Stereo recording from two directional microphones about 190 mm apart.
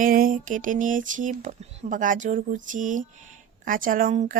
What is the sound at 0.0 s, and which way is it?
Speech, 50° right (ahead or behind).